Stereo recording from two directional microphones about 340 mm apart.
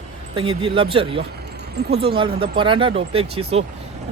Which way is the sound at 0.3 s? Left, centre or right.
Centre.